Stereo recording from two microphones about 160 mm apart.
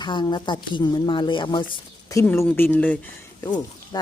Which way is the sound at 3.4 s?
25° left (ahead or behind).